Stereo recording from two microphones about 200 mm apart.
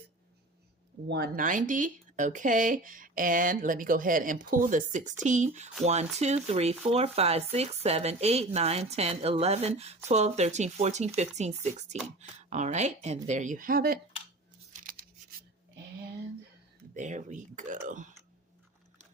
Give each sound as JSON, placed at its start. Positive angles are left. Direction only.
{"t": 1.0, "sound": "speech", "side_deg": -55}
{"t": 14.7, "sound": "tearing", "side_deg": -40}
{"t": 16.9, "sound": "speech", "side_deg": -40}